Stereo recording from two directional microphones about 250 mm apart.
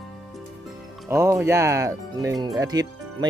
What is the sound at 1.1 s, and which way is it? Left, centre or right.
Speech, centre.